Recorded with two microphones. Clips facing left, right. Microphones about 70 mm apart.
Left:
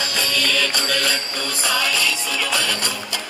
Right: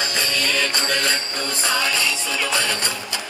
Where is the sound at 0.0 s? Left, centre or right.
Right.